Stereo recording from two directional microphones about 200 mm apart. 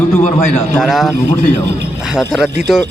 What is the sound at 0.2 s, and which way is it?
Speech, 35° left (ahead or behind).